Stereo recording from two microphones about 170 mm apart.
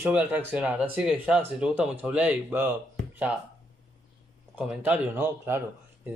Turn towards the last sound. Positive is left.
turn(degrees=-15)  # may be behind; listen again after turning